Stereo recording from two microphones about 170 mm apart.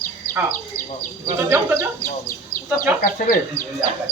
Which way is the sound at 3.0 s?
55° left (ahead or behind).